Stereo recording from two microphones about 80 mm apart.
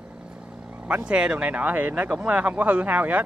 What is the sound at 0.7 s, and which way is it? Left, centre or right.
Speech, centre.